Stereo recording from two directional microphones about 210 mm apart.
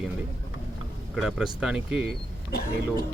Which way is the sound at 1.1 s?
Centre (ahead or behind).